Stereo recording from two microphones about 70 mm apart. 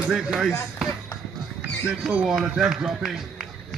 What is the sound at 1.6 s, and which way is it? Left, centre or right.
Speech, centre.